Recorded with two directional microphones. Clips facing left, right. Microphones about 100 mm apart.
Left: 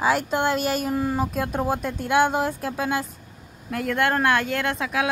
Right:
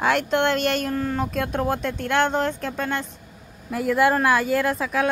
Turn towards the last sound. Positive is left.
turn(degrees=0)  # may be behind; listen again after turning